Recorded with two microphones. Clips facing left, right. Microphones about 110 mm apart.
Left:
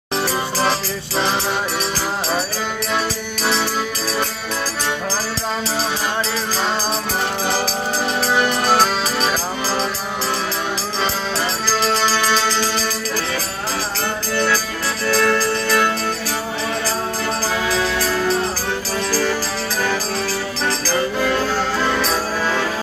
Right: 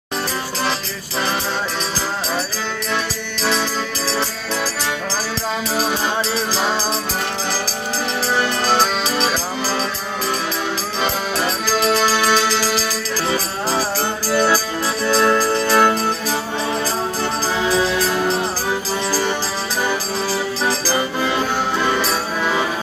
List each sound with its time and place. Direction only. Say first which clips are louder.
8.4 s music: left 1 dB; 10° left (ahead or behind)
12.0 s music: right 2 dB; 10° right (ahead or behind)
14.3 s music: right 4 dB; 15° right (ahead or behind)
17.6 s music: right 5 dB; 20° right (ahead or behind)